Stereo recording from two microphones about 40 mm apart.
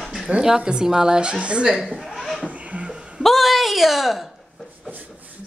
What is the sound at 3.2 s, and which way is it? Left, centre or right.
Speech, centre.